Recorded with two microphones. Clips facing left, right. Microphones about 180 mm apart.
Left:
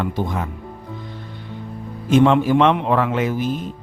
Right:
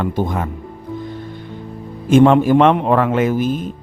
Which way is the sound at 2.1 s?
45° right (ahead or behind).